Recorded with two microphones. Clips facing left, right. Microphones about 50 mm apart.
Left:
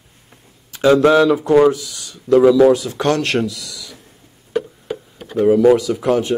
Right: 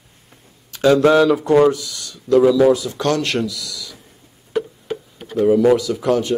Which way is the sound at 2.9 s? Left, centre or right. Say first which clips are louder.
Left 2 dB; centre.